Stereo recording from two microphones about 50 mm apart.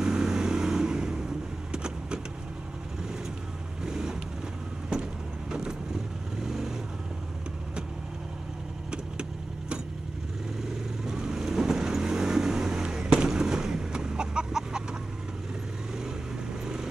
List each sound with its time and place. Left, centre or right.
0.0 s vehicle: centre
3.8 s vehicle: centre
5.5 s vehicle: centre
11.1 s vehicle: centre